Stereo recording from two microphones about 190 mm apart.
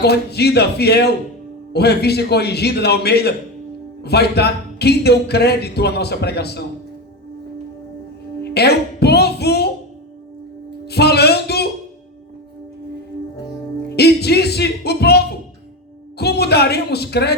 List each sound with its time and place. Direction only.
0.0 s speech: 60° left (ahead or behind)
8.4 s music: 60° left (ahead or behind)
10.8 s music: 60° left (ahead or behind)
13.9 s speech: 60° left (ahead or behind)